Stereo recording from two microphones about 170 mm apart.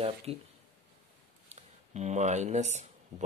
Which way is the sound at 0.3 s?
35° right (ahead or behind).